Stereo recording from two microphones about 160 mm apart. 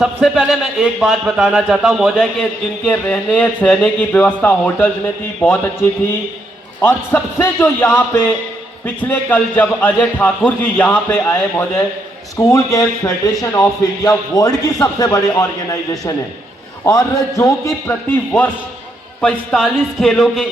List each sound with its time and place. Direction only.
0.0 s speech: 5° right (ahead or behind); by 4.9 s 10° left (ahead or behind)
6.8 s a man's voice: 10° left (ahead or behind)